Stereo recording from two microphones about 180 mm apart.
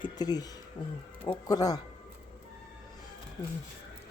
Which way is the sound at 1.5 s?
20° left (ahead or behind).